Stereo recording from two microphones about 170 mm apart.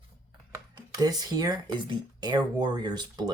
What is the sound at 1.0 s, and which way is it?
Speech, 20° right (ahead or behind).